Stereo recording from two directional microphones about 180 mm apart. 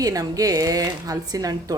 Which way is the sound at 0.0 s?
20° right (ahead or behind).